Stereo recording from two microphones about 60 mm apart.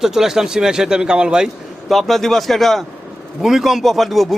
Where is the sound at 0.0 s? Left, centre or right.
Centre.